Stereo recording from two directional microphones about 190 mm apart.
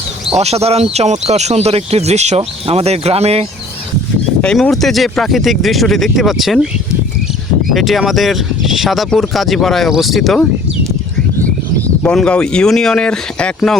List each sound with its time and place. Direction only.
0.3 s speech: 35° right (ahead or behind)
4.4 s speech: 5° left (ahead or behind)
7.7 s speech: centre (ahead or behind)
12.0 s speech: 5° left (ahead or behind)